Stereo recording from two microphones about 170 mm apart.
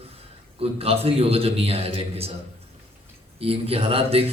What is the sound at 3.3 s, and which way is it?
Speech, 35° right (ahead or behind).